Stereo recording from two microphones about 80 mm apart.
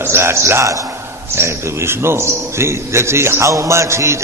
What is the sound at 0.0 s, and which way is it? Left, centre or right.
A man's voice, right.